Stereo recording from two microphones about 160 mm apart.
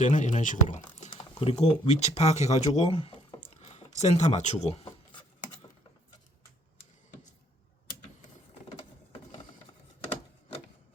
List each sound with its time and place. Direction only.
0.0 s speech: 50° left (ahead or behind)
1.2 s speech: 35° left (ahead or behind)
3.6 s a sound: 40° left (ahead or behind)
3.9 s speech: 45° left (ahead or behind)